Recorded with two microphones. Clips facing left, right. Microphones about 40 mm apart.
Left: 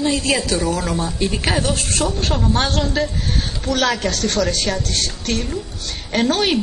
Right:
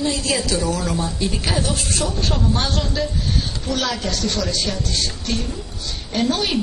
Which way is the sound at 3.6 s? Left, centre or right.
Left.